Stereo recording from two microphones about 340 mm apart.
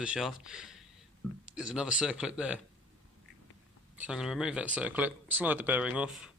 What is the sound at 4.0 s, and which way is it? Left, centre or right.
Speech, centre.